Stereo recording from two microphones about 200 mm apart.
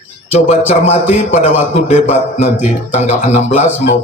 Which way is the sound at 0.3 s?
35° left (ahead or behind).